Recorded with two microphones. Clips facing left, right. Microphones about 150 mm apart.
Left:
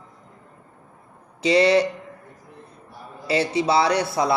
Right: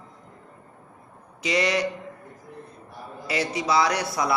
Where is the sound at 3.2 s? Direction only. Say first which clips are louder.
Left 5 dB; 30° left (ahead or behind).